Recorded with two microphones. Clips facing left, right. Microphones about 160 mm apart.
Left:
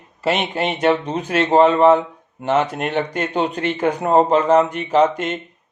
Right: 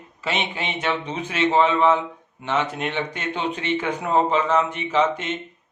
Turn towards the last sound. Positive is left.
turn(degrees=45)  # may be behind; listen again after turning